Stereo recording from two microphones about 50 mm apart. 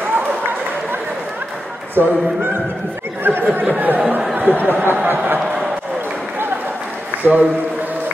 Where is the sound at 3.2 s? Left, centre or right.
Right.